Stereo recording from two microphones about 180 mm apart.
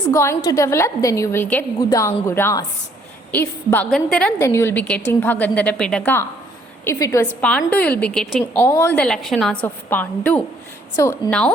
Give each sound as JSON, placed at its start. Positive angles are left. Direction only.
{"t": 0.1, "sound": "a woman's voice", "side_deg": 15}
{"t": 4.4, "sound": "a woman's voice", "side_deg": 15}
{"t": 8.6, "sound": "a woman's voice", "side_deg": 15}
{"t": 9.0, "sound": "a woman's voice", "side_deg": 5}